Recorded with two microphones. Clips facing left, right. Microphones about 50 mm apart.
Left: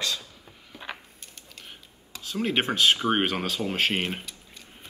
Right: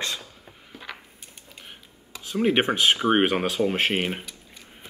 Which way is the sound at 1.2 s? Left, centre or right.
Centre.